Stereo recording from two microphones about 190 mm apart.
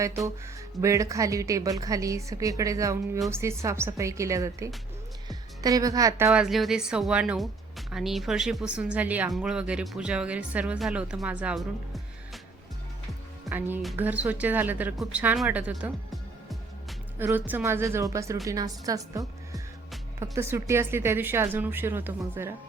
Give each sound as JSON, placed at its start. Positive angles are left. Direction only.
{"t": 0.8, "sound": "a woman's voice", "side_deg": -15}
{"t": 13.5, "sound": "speech", "side_deg": -10}
{"t": 17.2, "sound": "speech", "side_deg": -10}